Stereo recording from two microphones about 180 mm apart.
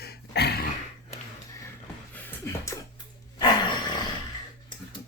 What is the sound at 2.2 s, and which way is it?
Music, 10° left (ahead or behind).